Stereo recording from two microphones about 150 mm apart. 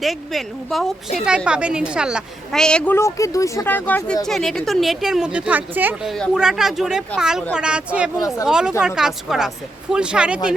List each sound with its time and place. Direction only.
0.0 s a woman's voice: centre (ahead or behind)